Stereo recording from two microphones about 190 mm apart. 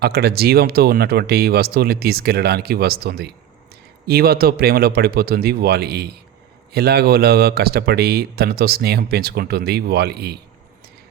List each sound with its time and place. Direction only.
0.0 s speech: 55° right (ahead or behind)